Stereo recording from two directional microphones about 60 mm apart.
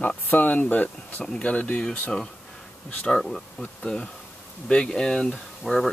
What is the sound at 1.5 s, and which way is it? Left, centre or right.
Speech, left.